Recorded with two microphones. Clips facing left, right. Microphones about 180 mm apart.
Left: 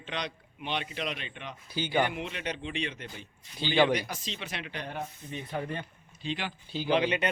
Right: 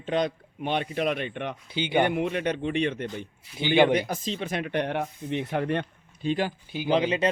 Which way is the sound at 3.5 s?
15° right (ahead or behind).